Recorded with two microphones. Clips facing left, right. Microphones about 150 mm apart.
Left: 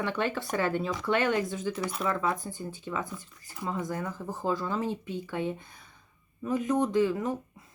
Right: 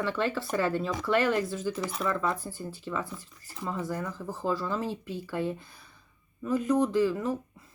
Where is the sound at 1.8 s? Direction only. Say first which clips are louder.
Even; centre (ahead or behind).